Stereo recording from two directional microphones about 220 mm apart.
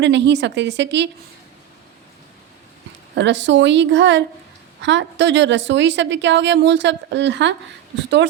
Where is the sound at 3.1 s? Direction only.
55° right (ahead or behind).